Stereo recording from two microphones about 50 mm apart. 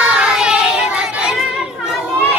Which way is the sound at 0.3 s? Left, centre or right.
Centre.